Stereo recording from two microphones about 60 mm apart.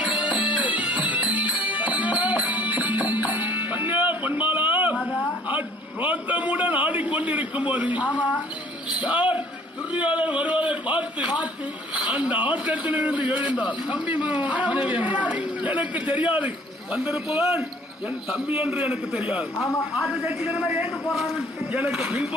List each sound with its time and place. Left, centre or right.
0.0 s music: right
5.5 s a sound: right
9.0 s a man's voice: centre
19.9 s a man's voice: centre